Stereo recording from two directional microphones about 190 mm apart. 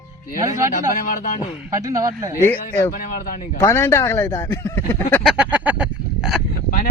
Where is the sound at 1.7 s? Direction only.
15° right (ahead or behind).